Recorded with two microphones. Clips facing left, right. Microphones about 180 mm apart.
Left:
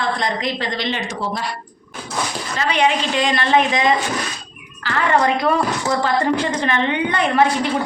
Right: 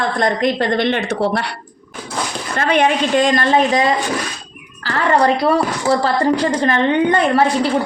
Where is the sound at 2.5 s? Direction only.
50° right (ahead or behind).